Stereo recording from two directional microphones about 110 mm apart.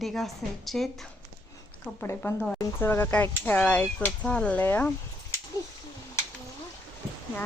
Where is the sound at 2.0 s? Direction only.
20° left (ahead or behind).